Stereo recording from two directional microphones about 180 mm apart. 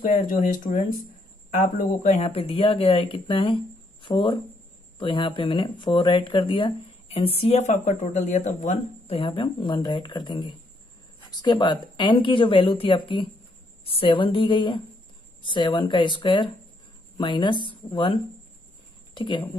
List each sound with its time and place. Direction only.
0.0 s speech: 50° left (ahead or behind); by 19.4 s 25° left (ahead or behind)